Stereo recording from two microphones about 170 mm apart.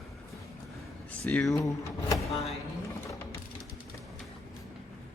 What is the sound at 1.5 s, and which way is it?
Speech, 20° left (ahead or behind).